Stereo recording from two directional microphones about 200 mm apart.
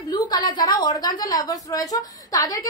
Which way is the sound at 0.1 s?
20° left (ahead or behind).